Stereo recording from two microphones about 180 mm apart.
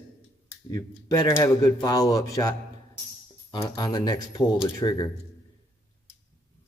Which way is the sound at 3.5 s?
25° left (ahead or behind).